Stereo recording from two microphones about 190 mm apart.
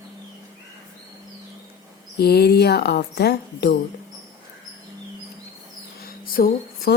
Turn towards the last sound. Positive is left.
turn(degrees=50)  # may be behind; listen again after turning